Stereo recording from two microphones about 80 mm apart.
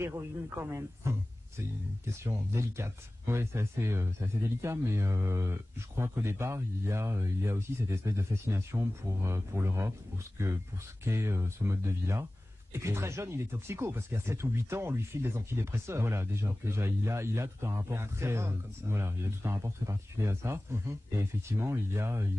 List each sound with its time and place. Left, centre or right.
0.0 s speech: right